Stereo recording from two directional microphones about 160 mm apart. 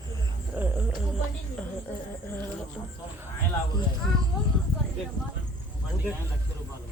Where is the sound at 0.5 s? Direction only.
10° right (ahead or behind).